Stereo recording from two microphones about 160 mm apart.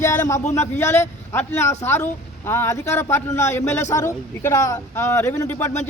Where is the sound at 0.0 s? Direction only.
15° left (ahead or behind).